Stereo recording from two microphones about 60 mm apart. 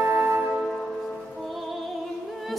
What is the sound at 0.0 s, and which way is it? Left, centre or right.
Music, right.